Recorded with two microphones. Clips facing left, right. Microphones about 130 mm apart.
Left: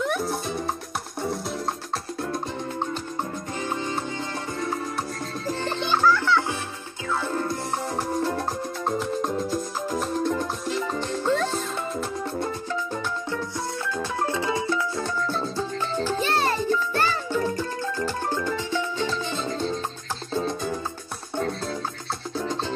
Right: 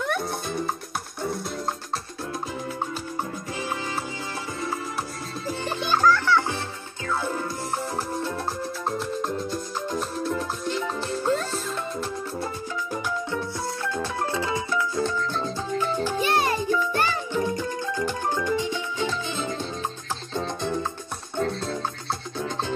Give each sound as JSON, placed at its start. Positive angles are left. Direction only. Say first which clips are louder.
{"t": 0.0, "sound": "music", "louder": "left 2 dB", "side_deg": 0}
{"t": 3.6, "sound": "music", "louder": "left 2 dB", "side_deg": -5}
{"t": 5.5, "sound": "music", "louder": "even", "side_deg": -10}
{"t": 5.9, "sound": "music", "louder": "right 1 dB", "side_deg": 10}
{"t": 7.2, "sound": "music", "louder": "left 3 dB", "side_deg": 0}
{"t": 11.1, "sound": "music", "louder": "even", "side_deg": -40}
{"t": 13.9, "sound": "music", "louder": "left 2 dB", "side_deg": 25}
{"t": 16.0, "sound": "music", "louder": "left 2 dB", "side_deg": -15}